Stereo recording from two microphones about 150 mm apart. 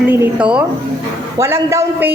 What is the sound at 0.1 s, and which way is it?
Speech, 5° right (ahead or behind).